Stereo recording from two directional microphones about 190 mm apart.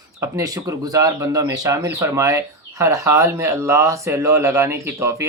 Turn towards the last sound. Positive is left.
turn(degrees=-15)  # may be behind; listen again after turning